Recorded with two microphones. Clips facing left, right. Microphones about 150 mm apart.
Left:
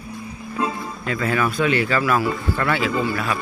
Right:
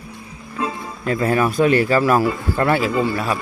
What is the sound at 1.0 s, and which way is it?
Speech, 40° right (ahead or behind).